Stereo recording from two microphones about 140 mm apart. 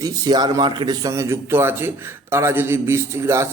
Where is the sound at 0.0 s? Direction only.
30° right (ahead or behind).